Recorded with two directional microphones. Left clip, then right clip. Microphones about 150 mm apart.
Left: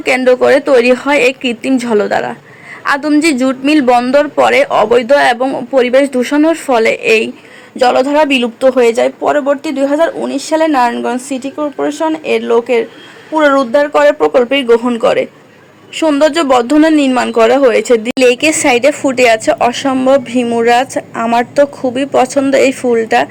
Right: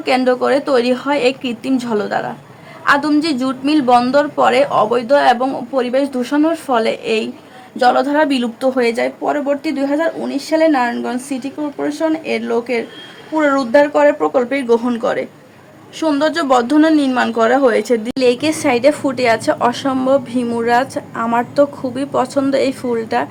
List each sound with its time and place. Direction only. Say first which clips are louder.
0.0 s a woman's voice: left 5 dB; 30° left (ahead or behind)
8.9 s a woman's voice: left 6 dB; 30° left (ahead or behind)
16.0 s a woman's voice: left 5 dB; 30° left (ahead or behind)